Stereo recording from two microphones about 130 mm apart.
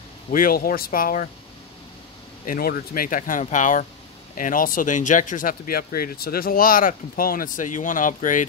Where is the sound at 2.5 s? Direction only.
90° left; by 3.9 s 75° left (ahead or behind).